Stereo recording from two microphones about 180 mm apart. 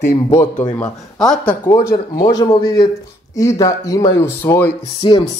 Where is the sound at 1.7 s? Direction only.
20° left (ahead or behind).